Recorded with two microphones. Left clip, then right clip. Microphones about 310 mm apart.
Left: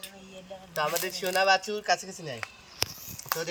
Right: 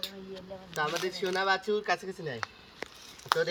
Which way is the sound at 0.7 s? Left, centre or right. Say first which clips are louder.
Left 2 dB; centre.